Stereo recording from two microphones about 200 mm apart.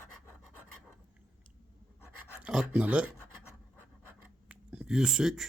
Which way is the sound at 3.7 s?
10° right (ahead or behind).